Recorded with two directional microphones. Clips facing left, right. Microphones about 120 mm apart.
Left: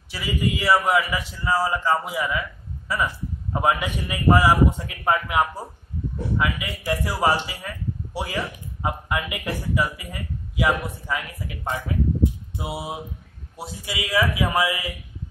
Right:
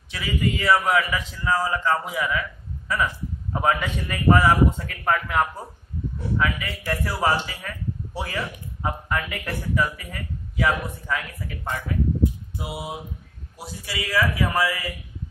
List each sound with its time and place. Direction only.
0.1 s a man's voice: 10° left (ahead or behind)
3.5 s speech: 10° left (ahead or behind)
12.5 s music: 25° left (ahead or behind)
13.6 s speech: 20° left (ahead or behind)